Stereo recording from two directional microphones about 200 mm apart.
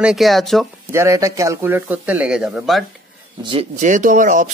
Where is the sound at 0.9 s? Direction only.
15° right (ahead or behind).